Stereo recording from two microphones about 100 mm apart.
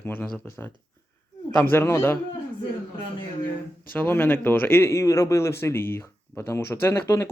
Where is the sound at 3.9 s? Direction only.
20° left (ahead or behind).